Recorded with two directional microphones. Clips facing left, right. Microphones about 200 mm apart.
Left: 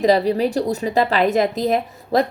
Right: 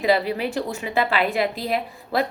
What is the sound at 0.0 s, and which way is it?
A woman's voice, 40° left (ahead or behind).